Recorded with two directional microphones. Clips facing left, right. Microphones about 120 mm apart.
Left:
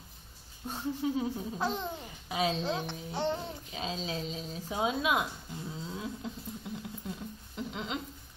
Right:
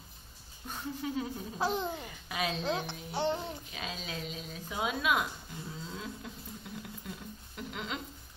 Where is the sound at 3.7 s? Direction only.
30° left (ahead or behind).